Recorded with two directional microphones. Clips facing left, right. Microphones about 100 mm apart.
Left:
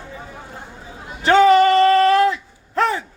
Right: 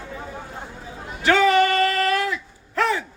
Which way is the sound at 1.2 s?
30° left (ahead or behind).